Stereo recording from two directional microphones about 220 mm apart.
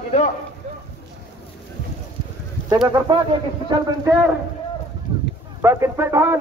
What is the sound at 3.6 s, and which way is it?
Speech, 15° right (ahead or behind).